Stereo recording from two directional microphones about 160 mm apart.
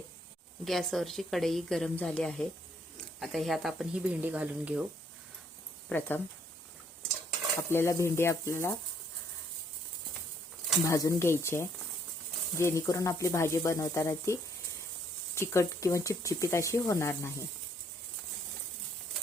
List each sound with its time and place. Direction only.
0.6 s speech: centre (ahead or behind)
5.9 s speech: 10° left (ahead or behind)
7.7 s speech: 15° left (ahead or behind)
10.8 s speech: 20° left (ahead or behind)
15.4 s speech: 20° left (ahead or behind)